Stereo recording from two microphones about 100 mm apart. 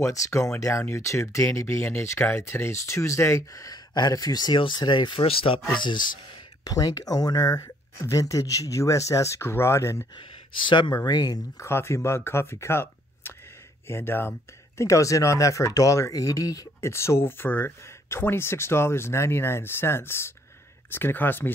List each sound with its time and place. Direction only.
0.0 s speech: 30° left (ahead or behind); by 5.2 s 50° left (ahead or behind)
5.2 s speech: 65° left (ahead or behind)
5.8 s speech: 50° left (ahead or behind)
6.6 s speech: 40° left (ahead or behind)
10.7 s speech: 50° left (ahead or behind)
11.5 s speech: 25° left (ahead or behind)
14.8 s speech: 30° left (ahead or behind)